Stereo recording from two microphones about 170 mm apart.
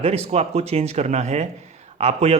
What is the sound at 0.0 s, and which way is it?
A man's voice, 40° right (ahead or behind).